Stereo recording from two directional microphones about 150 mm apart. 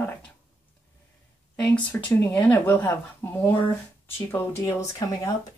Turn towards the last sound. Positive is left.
turn(degrees=20)  # may be behind; listen again after turning